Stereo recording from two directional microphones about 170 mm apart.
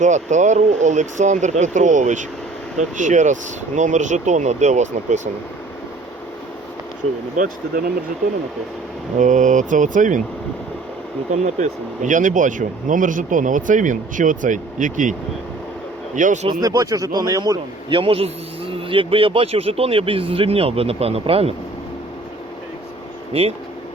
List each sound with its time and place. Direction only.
0.0 s speech: 45° right (ahead or behind)
7.3 s speech: 60° right (ahead or behind)
9.1 s speech: 45° right (ahead or behind)
11.3 s speech: 45° right (ahead or behind)
16.1 s speech: 45° right (ahead or behind)
16.5 s a man's voice: 20° right (ahead or behind)
23.3 s a man's voice: 35° right (ahead or behind)